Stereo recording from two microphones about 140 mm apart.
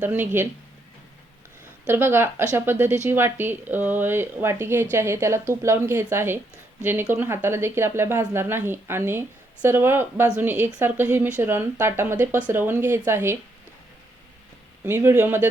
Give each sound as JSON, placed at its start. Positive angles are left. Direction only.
{"t": 0.0, "sound": "speech", "side_deg": -15}
{"t": 1.9, "sound": "speech", "side_deg": -15}
{"t": 14.8, "sound": "speech", "side_deg": -20}